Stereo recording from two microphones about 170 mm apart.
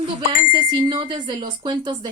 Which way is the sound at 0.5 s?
30° right (ahead or behind).